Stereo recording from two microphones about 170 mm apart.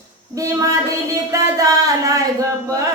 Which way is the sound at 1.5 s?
20° right (ahead or behind).